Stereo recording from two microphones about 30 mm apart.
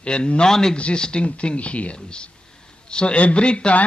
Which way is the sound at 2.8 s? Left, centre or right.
Left.